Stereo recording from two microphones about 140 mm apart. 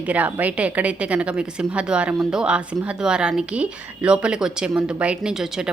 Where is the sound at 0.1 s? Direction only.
10° right (ahead or behind).